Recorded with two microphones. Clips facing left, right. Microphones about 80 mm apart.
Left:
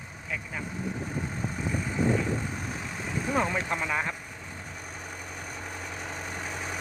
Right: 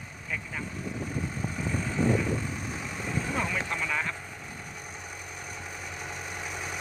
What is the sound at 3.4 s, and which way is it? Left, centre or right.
Speech, left.